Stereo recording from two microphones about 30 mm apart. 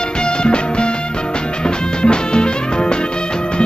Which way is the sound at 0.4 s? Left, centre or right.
Left.